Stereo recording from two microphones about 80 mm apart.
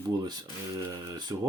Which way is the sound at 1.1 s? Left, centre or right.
Right.